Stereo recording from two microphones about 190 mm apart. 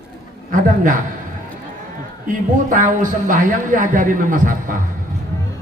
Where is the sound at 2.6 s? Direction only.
45° right (ahead or behind).